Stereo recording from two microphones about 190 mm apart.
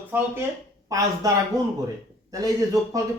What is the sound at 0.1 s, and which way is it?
Speech, 10° right (ahead or behind).